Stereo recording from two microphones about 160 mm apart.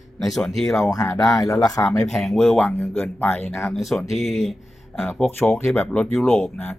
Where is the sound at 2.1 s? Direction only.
Centre (ahead or behind).